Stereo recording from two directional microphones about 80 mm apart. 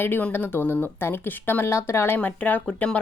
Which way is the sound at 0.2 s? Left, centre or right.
Left.